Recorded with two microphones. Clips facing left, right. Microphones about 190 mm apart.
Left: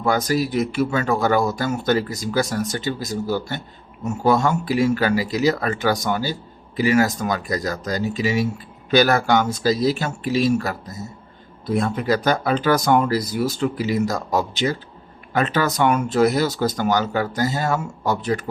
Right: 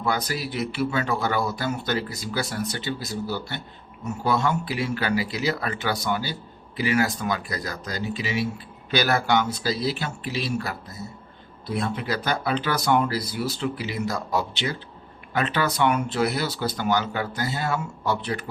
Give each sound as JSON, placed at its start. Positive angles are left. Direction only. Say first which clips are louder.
{"t": 0.0, "sound": "speech", "louder": "left 7 dB", "side_deg": 45}